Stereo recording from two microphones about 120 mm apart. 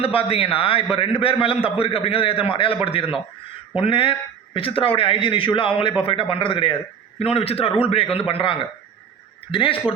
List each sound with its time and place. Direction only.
0.0 s a man's voice: 50° left (ahead or behind)